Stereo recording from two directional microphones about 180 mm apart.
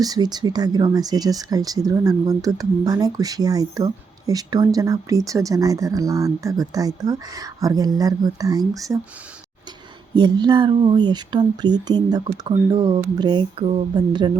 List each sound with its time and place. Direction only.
0.0 s speech: 20° right (ahead or behind)
10.2 s speech: 25° right (ahead or behind)